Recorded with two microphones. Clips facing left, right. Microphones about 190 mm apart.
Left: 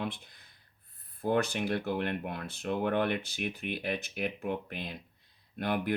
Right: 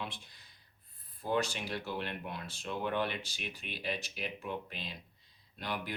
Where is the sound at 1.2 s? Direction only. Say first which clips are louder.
Left 5 dB; 55° left (ahead or behind).